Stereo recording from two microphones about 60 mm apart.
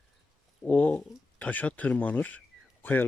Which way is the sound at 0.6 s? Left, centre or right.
Left.